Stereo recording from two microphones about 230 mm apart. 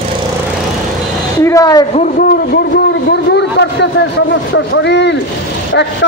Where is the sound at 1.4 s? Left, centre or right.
Centre.